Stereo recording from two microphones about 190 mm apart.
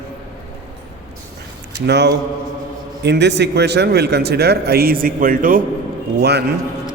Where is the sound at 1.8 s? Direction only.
65° right (ahead or behind); by 5.6 s 45° right (ahead or behind).